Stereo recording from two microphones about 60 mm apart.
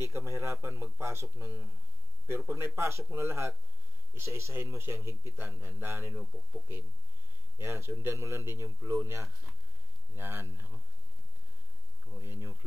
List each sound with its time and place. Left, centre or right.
0.0 s speech: right
5.3 s speech: right
7.5 s speech: right
7.9 s speech: right
8.2 s speech: right
12.2 s speech: right